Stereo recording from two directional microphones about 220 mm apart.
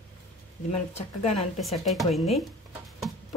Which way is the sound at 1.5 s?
Centre (ahead or behind).